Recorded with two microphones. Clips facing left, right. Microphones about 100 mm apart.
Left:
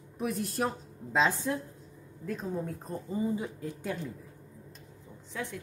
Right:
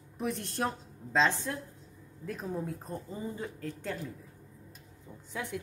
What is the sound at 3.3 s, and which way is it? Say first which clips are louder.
Speech: left 3 dB; 10° left (ahead or behind).